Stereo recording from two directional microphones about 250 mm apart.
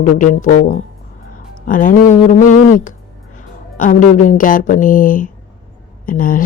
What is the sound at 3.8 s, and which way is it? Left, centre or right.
Speech, left.